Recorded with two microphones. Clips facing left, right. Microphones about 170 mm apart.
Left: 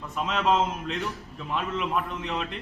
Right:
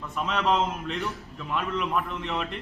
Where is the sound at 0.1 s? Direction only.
Centre (ahead or behind).